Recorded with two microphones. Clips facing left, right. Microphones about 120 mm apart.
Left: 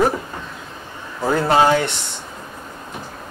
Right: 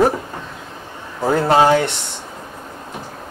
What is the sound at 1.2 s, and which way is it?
Mantra, 30° right (ahead or behind).